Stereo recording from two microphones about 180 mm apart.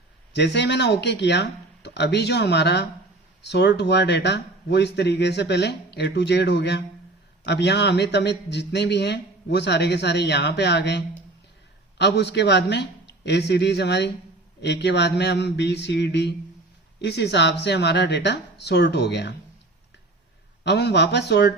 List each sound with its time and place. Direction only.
0.3 s a man's voice: 70° left (ahead or behind)
20.7 s a man's voice: 65° left (ahead or behind)